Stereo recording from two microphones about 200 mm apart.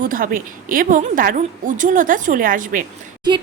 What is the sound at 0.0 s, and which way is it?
A woman's voice, 45° right (ahead or behind).